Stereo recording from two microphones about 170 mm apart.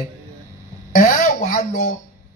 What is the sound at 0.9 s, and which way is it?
Speech, 50° left (ahead or behind).